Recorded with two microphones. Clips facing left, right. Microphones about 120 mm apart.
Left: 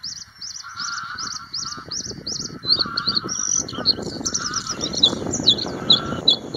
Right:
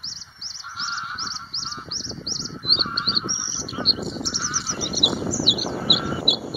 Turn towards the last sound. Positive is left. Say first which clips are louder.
# even
turn(degrees=0)  # may be behind; listen again after turning